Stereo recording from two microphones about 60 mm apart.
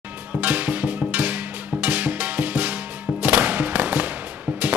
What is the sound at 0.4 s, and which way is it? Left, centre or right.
Music, right.